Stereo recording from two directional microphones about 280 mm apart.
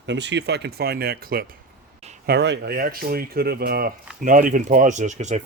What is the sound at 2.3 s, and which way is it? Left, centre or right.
Speech, right.